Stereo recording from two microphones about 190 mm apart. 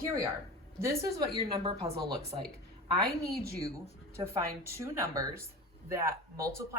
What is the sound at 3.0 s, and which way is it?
Speech, 55° right (ahead or behind).